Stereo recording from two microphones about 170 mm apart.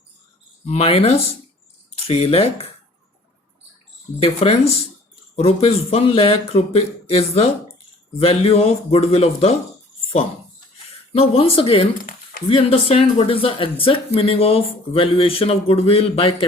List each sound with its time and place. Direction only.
0.6 s speech: 35° left (ahead or behind)
4.2 s speech: 35° left (ahead or behind)